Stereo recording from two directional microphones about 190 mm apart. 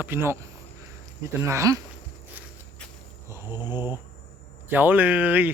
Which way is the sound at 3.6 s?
20° left (ahead or behind).